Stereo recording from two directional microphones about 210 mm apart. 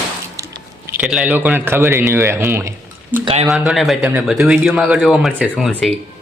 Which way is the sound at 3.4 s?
Centre (ahead or behind).